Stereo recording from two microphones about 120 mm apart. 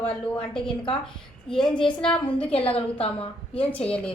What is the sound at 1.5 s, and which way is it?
Speech, 40° left (ahead or behind).